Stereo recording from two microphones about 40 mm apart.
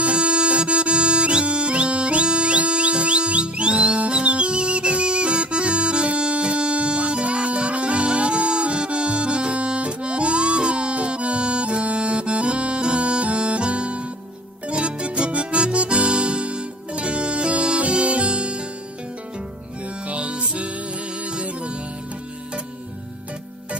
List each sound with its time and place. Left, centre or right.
0.0 s music: right
20.1 s music: right